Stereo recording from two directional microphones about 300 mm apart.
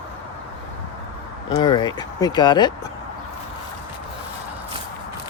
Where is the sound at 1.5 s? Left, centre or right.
Centre.